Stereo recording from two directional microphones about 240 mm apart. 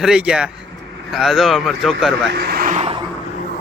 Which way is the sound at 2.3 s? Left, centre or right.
Right.